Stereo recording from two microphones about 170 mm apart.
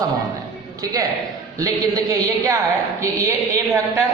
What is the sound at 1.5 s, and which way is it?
A man's voice, 20° right (ahead or behind).